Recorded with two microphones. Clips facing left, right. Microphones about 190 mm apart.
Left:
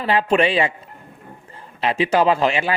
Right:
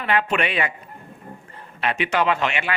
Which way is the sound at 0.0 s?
30° left (ahead or behind).